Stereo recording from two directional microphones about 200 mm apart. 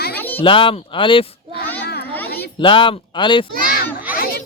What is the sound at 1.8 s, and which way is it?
Children playing, 55° left (ahead or behind).